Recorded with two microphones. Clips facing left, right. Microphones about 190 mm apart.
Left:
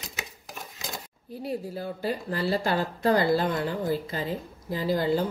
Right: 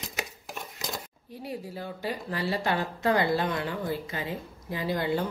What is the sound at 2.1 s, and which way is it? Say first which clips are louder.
A woman's voice: left 3 dB; 35° left (ahead or behind).